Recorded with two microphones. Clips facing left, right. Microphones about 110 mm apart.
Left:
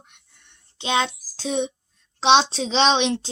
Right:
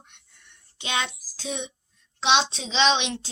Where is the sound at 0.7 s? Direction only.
30° left (ahead or behind).